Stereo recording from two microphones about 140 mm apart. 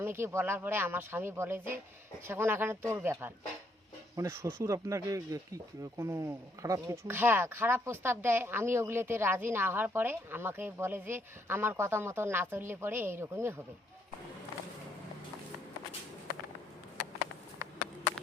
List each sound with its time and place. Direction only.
0.0 s speech: 15° right (ahead or behind)